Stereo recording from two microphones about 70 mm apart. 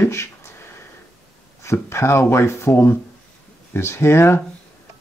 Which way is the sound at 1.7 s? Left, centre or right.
Left.